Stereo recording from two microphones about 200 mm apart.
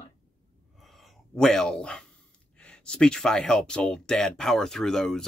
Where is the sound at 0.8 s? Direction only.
Centre (ahead or behind).